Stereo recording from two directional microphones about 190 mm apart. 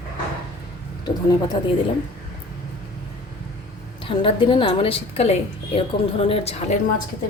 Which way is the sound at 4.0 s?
25° left (ahead or behind).